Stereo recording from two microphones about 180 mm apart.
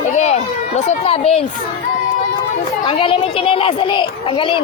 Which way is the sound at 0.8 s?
35° left (ahead or behind).